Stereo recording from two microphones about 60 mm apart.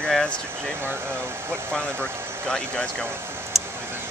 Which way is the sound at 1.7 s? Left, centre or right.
Centre.